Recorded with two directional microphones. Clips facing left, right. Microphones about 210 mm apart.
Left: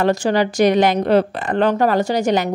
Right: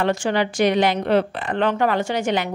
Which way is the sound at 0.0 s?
40° left (ahead or behind).